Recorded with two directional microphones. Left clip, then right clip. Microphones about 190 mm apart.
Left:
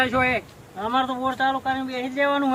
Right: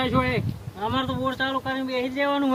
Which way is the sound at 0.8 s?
10° right (ahead or behind).